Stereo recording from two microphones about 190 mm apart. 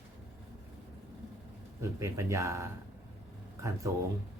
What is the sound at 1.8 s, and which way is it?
Speech, 15° right (ahead or behind).